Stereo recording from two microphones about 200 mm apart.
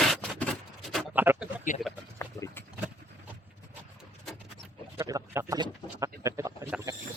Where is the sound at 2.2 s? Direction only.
10° left (ahead or behind).